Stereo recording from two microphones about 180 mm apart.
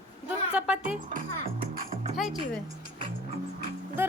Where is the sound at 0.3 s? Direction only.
5° right (ahead or behind).